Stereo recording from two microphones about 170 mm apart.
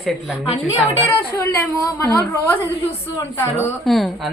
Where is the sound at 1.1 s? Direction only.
20° left (ahead or behind).